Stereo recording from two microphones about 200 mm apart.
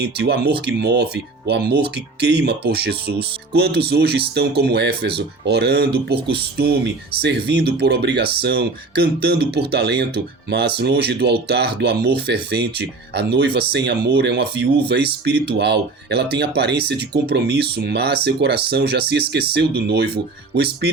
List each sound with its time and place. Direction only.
0.0 s speech: 55° right (ahead or behind)